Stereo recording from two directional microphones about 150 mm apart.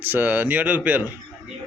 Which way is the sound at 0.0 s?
15° right (ahead or behind).